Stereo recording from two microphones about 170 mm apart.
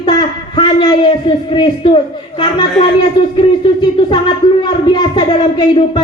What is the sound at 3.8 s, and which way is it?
A woman's voice, 25° left (ahead or behind).